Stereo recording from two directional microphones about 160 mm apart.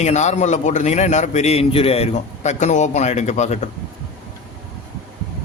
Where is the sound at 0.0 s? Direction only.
45° left (ahead or behind).